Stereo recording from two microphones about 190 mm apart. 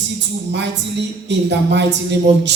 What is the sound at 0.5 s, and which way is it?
A woman's voice, 65° right (ahead or behind).